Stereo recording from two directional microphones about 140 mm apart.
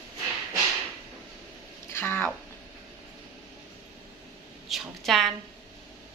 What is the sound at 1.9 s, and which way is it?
Speech, 15° left (ahead or behind).